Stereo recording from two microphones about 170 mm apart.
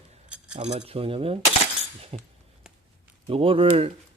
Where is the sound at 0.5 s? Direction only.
40° right (ahead or behind).